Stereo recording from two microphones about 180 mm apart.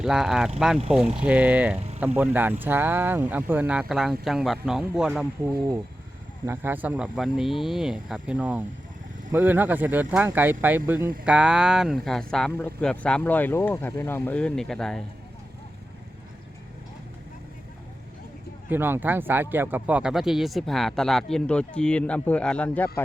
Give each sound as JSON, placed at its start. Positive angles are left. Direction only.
{"t": 0.0, "sound": "speech", "side_deg": -5}
{"t": 5.5, "sound": "speech", "side_deg": -20}
{"t": 18.7, "sound": "speech", "side_deg": -10}